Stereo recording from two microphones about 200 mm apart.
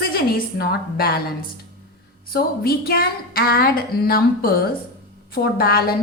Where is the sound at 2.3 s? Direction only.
50° left (ahead or behind).